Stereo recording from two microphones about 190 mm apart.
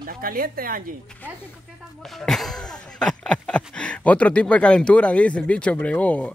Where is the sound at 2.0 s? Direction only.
Centre (ahead or behind).